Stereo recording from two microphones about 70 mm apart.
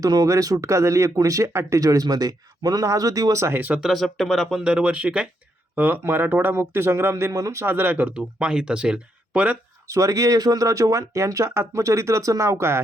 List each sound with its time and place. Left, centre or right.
0.0 s speech: right
3.4 s speech: right
3.8 s speech: centre
4.6 s speech: centre; by 7.3 s right
7.3 s speech: right
7.6 s speech: right
8.1 s speech: centre
9.8 s speech: right